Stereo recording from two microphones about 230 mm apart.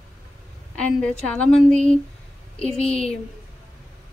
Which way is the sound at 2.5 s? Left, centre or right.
Left.